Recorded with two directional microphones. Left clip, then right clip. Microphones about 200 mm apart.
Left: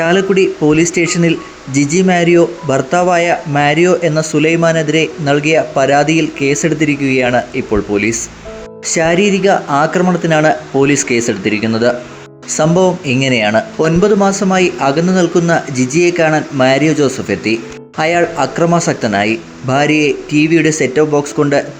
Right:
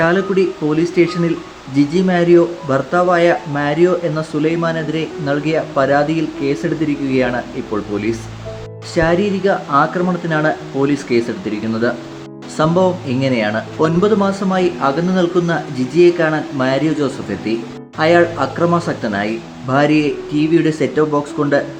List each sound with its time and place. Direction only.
0.0 s speech: 20° left (ahead or behind)